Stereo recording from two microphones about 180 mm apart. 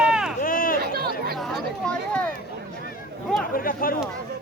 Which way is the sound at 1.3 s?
Centre (ahead or behind).